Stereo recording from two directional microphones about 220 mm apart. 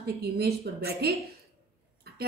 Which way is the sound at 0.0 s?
45° right (ahead or behind).